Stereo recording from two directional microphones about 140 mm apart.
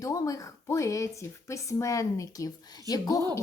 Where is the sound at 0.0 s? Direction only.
25° left (ahead or behind).